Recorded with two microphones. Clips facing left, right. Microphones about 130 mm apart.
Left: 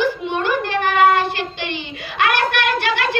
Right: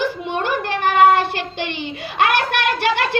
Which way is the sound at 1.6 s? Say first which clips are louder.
Right 2 dB; 50° right (ahead or behind).